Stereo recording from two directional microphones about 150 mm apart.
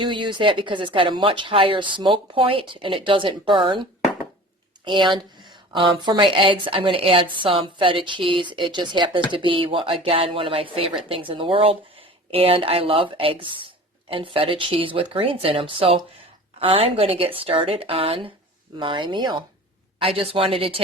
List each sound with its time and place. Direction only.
0.0 s a woman's voice: 30° right (ahead or behind)
4.9 s a woman's voice: 35° right (ahead or behind)